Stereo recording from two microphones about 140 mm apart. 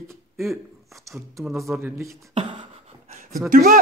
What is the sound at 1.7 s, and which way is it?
Speech, 15° right (ahead or behind).